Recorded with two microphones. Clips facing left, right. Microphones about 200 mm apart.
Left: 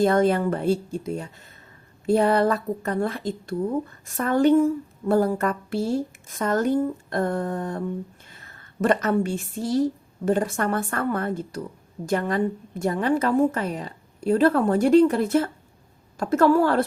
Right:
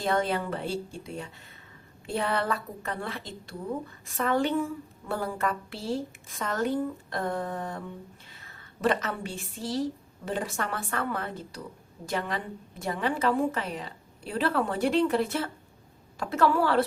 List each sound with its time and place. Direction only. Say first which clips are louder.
0.0 s a woman's voice: left 8 dB; 45° left (ahead or behind)